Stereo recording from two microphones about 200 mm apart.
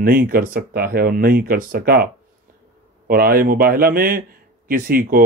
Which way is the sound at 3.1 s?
50° right (ahead or behind).